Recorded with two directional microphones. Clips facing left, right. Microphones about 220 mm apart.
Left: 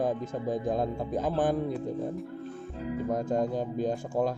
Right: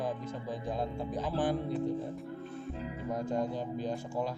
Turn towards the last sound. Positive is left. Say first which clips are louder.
# left 6 dB
turn(degrees=45)  # may be behind; listen again after turning